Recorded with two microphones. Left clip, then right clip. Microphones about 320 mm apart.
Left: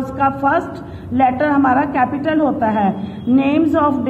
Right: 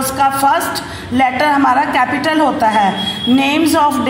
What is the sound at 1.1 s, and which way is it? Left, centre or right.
A woman's voice, centre.